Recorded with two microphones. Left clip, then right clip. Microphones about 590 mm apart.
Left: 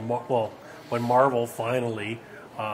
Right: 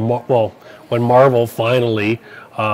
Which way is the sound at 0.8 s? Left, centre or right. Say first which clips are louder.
Right 10 dB; right.